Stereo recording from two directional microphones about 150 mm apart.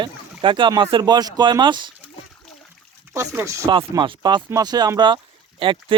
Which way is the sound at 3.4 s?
20° right (ahead or behind).